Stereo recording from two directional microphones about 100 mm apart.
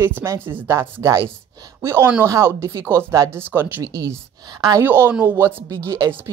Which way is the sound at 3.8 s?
35° right (ahead or behind).